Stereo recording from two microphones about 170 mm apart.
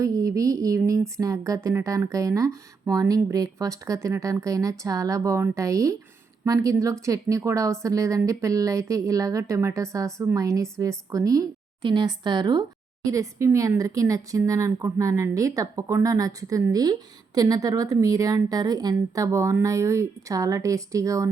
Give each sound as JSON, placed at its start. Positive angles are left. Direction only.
{"t": 0.0, "sound": "speech", "side_deg": -20}